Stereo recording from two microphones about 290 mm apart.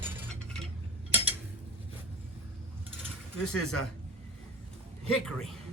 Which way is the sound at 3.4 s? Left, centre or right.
Left.